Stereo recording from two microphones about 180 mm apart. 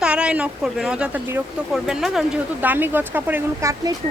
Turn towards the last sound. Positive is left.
turn(degrees=-15)  # may be behind; listen again after turning